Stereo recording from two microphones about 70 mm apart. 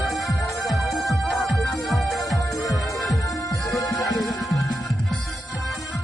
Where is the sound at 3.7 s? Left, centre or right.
Centre.